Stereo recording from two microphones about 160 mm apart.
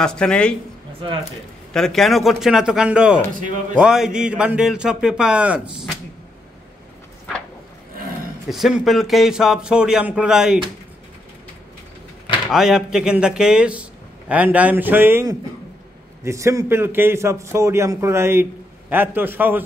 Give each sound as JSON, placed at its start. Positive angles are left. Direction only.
{"t": 0.0, "sound": "a man's voice", "side_deg": 5}
{"t": 1.7, "sound": "a man's voice", "side_deg": 5}
{"t": 8.5, "sound": "a man's voice", "side_deg": -5}
{"t": 12.4, "sound": "a man's voice", "side_deg": -5}